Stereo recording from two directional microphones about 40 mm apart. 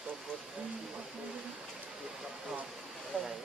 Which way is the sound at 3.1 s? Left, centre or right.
Right.